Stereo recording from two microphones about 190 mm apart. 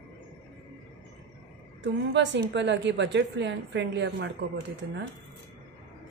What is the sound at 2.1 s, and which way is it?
A woman's voice, 65° right (ahead or behind).